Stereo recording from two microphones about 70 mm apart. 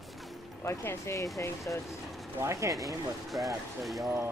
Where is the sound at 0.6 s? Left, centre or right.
Left.